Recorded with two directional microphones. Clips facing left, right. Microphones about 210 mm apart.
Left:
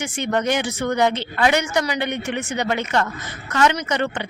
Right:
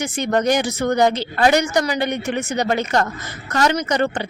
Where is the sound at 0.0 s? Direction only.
40° right (ahead or behind).